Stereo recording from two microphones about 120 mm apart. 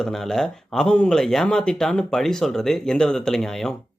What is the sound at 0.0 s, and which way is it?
Speech, 5° left (ahead or behind).